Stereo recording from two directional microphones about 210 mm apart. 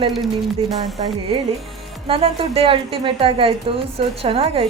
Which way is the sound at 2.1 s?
25° right (ahead or behind).